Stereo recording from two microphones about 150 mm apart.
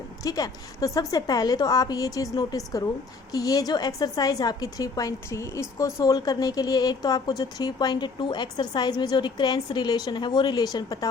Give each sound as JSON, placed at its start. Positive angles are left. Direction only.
{"t": 0.2, "sound": "a woman's voice", "side_deg": 25}